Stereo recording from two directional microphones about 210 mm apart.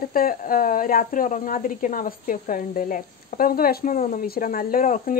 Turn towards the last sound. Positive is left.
turn(degrees=40)  # may be behind; listen again after turning